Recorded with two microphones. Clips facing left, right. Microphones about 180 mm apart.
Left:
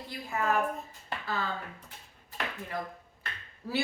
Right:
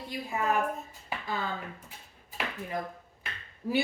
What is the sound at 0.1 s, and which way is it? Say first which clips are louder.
A woman's voice: even; 15° right (ahead or behind).